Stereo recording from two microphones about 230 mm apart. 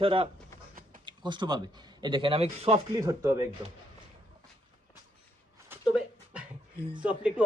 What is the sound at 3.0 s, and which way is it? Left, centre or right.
Speech, centre.